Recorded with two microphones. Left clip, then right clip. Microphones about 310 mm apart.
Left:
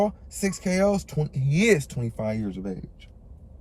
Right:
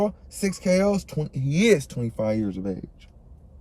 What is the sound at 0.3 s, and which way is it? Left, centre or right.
Speech, centre.